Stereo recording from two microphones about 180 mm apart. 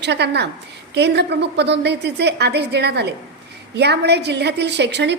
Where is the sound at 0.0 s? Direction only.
70° right (ahead or behind).